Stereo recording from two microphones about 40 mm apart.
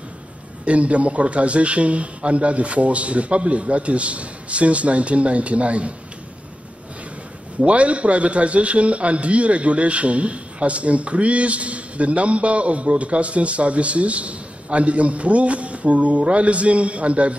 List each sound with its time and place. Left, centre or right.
0.7 s a man's voice: right
7.6 s a man's voice: right